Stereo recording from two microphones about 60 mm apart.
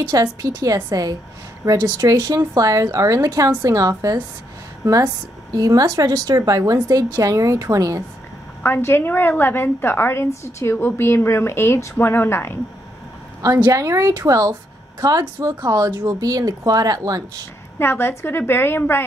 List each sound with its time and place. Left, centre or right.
0.2 s a woman's voice: right
0.8 s speech: right
1.7 s a woman's voice: right
5.6 s a woman's voice: right
7.2 s a woman's voice: right
8.6 s a woman's voice: left
13.4 s a woman's voice: right
17.7 s a woman's voice: left